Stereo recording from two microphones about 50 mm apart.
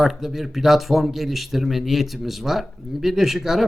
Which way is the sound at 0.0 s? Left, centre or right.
Centre.